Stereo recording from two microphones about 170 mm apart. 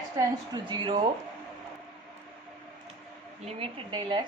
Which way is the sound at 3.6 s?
25° right (ahead or behind).